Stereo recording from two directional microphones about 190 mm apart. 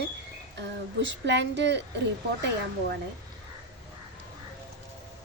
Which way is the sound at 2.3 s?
60° right (ahead or behind).